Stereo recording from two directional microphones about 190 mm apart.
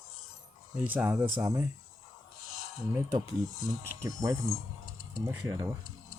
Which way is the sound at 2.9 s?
15° right (ahead or behind).